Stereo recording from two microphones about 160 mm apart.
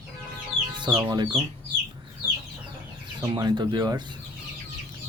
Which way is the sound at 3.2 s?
25° right (ahead or behind).